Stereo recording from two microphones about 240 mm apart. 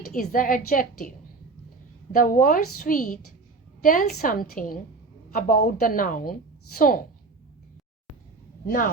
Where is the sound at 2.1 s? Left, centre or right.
Left.